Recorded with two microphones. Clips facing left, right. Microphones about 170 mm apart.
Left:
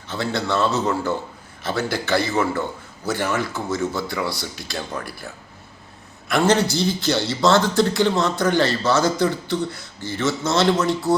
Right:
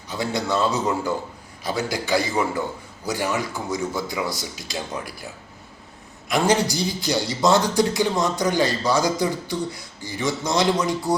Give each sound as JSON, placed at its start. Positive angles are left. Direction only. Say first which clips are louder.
{"t": 0.1, "sound": "a man's voice", "louder": "left 1 dB", "side_deg": -15}